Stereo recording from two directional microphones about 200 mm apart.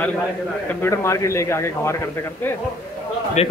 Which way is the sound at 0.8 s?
15° left (ahead or behind).